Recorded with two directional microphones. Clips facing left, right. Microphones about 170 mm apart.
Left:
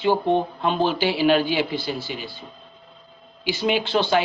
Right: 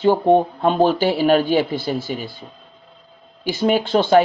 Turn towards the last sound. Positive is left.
turn(degrees=-45)  # may be behind; listen again after turning